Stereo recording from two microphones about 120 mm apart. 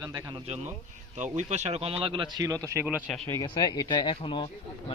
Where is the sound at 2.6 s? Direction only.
20° right (ahead or behind).